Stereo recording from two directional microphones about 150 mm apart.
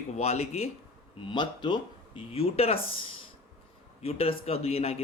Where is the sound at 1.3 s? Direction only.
30° left (ahead or behind).